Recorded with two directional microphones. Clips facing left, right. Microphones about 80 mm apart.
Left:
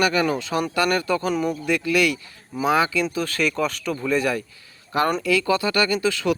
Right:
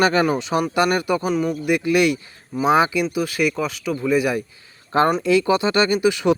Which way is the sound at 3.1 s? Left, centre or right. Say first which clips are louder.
Right 2 dB; centre.